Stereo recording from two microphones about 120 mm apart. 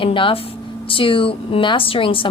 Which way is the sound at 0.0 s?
45° left (ahead or behind).